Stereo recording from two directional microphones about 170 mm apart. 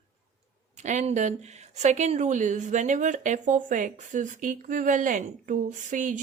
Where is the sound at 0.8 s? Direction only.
45° right (ahead or behind).